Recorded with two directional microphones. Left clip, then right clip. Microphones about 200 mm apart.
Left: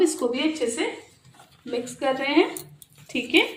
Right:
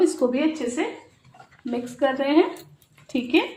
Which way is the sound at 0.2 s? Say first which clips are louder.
Right 3 dB; 45° right (ahead or behind).